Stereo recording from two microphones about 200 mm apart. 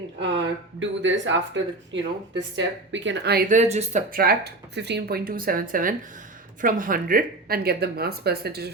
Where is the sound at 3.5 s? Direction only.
35° right (ahead or behind).